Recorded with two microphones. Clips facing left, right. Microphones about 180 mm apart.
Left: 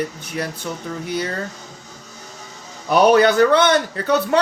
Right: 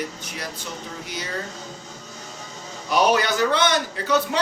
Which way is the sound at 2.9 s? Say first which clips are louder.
Left 7 dB; 55° left (ahead or behind).